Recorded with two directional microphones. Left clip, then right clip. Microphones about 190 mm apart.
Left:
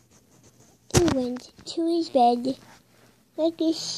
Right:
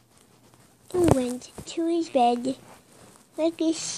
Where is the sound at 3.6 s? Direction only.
30° left (ahead or behind).